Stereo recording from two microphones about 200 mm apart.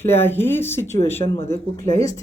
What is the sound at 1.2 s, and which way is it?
Speech, 30° left (ahead or behind).